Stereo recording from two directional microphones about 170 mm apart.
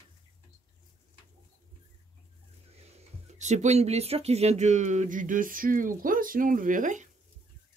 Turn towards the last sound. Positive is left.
turn(degrees=-50)  # may be behind; listen again after turning